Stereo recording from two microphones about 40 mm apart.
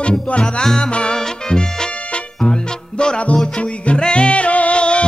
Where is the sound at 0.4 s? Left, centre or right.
Centre.